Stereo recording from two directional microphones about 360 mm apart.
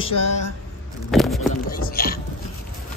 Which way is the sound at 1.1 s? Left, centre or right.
Centre.